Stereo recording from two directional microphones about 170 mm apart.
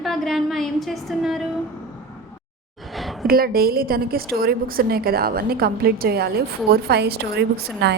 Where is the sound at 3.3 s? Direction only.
60° right (ahead or behind).